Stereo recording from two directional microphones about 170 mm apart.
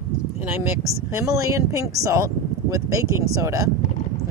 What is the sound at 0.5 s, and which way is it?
Speech, 15° right (ahead or behind).